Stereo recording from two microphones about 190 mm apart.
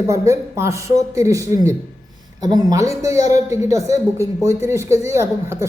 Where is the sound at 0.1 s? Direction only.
15° right (ahead or behind).